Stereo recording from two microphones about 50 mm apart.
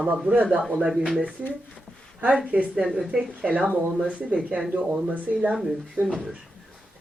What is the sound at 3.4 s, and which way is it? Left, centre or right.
Speech, right.